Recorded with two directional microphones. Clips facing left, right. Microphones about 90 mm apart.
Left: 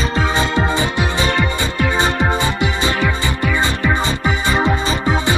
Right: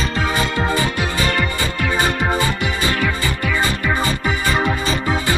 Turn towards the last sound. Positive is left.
turn(degrees=25)  # may be behind; listen again after turning